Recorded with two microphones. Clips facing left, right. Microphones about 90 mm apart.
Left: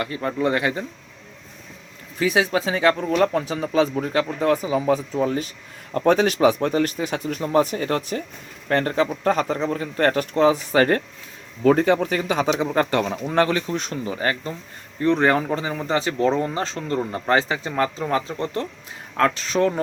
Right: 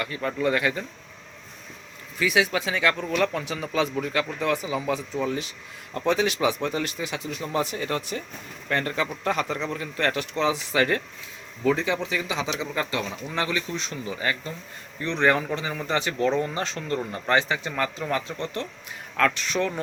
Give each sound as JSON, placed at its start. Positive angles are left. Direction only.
{"t": 0.0, "sound": "speech", "side_deg": 30}
{"t": 2.1, "sound": "speech", "side_deg": 35}